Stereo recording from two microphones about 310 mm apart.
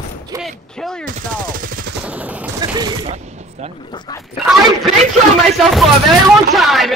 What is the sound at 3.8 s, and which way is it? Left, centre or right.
Speech, centre.